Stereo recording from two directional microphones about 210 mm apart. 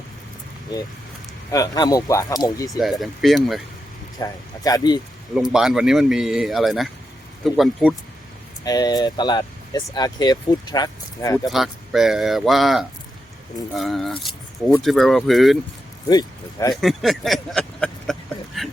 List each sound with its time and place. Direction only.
1.5 s speech: 15° left (ahead or behind)
2.6 s speech: centre (ahead or behind)
4.2 s speech: 15° left (ahead or behind)
5.3 s speech: centre (ahead or behind)
8.6 s speech: 20° left (ahead or behind)
11.4 s speech: centre (ahead or behind)
16.0 s speech: 20° left (ahead or behind)
16.8 s a sound: centre (ahead or behind)